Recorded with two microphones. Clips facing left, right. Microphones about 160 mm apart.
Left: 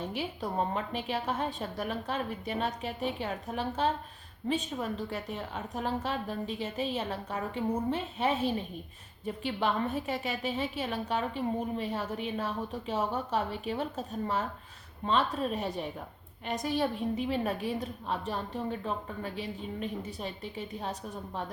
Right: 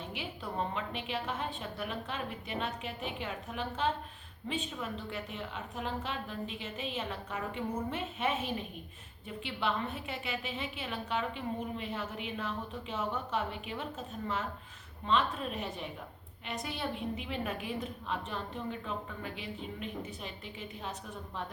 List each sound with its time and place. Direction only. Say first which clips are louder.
0.1 s a woman's voice: left 6 dB; 40° left (ahead or behind)